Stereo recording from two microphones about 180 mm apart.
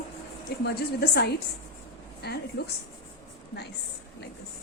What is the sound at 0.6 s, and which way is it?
A woman's voice, 60° left (ahead or behind).